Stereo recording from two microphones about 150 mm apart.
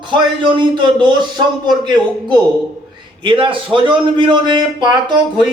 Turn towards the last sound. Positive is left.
turn(degrees=-30)  # may be behind; listen again after turning